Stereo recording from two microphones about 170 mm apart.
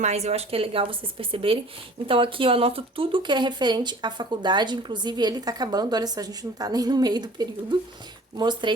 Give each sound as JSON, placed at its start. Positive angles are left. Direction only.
{"t": 0.0, "sound": "speech", "side_deg": -40}